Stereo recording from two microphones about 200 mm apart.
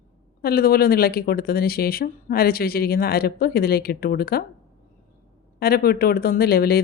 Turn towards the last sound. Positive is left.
turn(degrees=50)  # may be behind; listen again after turning